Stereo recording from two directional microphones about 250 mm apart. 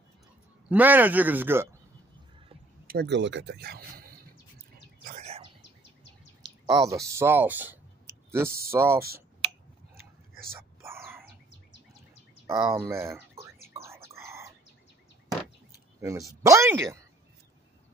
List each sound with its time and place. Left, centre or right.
0.7 s speech: centre
2.9 s speech: right
5.0 s bird: right
6.6 s speech: centre
10.8 s dog: centre
12.4 s speech: centre
13.8 s bird: centre
16.0 s speech: centre